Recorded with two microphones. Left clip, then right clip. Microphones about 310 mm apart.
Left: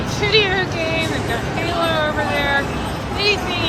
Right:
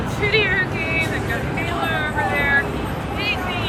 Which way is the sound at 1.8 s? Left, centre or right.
Centre.